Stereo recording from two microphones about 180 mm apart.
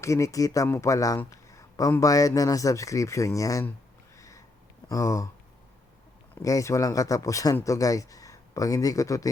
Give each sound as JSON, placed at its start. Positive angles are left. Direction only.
{"t": 0.0, "sound": "speech", "side_deg": 15}
{"t": 4.2, "sound": "sniff", "side_deg": 15}
{"t": 4.9, "sound": "speech", "side_deg": 15}
{"t": 6.4, "sound": "speech", "side_deg": 15}